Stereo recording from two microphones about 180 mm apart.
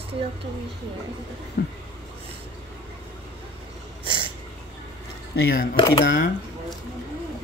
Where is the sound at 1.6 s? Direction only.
60° left (ahead or behind).